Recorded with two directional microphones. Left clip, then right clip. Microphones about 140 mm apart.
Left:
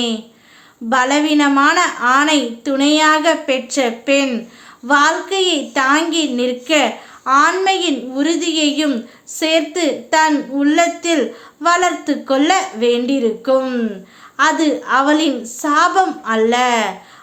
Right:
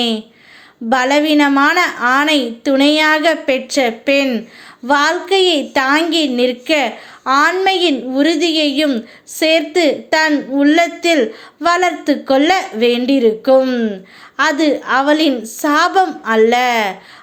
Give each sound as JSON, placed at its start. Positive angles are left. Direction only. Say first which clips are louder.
{"t": 0.9, "sound": "a woman's voice", "louder": "right 2 dB", "side_deg": -30}